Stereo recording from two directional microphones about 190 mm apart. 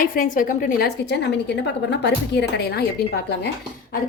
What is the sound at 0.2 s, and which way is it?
A woman's voice, 45° left (ahead or behind).